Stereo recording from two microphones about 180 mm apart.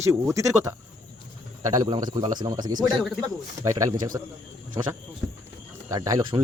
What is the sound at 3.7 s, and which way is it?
Speech, 25° right (ahead or behind).